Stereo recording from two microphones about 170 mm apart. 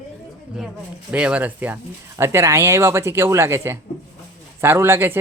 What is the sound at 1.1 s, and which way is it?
Speech, 5° right (ahead or behind).